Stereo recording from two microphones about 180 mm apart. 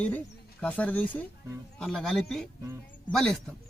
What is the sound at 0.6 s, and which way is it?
Speech, 10° left (ahead or behind).